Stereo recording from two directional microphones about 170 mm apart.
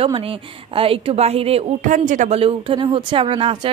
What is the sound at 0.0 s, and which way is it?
A woman's voice, 30° right (ahead or behind).